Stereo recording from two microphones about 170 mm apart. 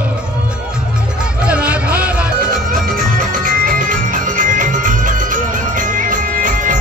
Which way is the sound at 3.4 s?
55° right (ahead or behind).